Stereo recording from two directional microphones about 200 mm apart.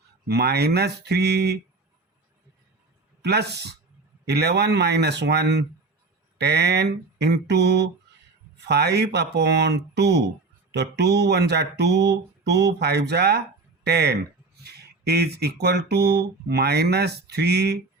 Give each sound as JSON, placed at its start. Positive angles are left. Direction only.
{"t": 0.3, "sound": "speech", "side_deg": -55}
{"t": 3.2, "sound": "speech", "side_deg": -55}